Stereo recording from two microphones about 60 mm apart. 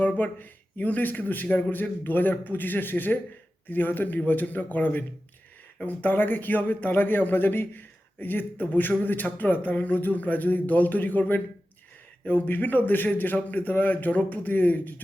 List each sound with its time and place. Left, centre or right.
0.0 s speech: left
1.7 s a man's voice: left